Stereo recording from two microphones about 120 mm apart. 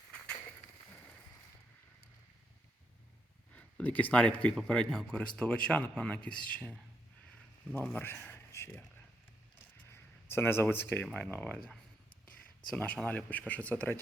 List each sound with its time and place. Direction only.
3.5 s speech: 10° left (ahead or behind)
7.9 s speech: 15° left (ahead or behind)
9.9 s a sound: 20° left (ahead or behind)
11.0 s speech: 5° left (ahead or behind)